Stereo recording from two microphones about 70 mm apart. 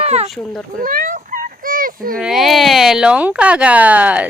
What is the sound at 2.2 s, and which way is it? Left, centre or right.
Speech, centre.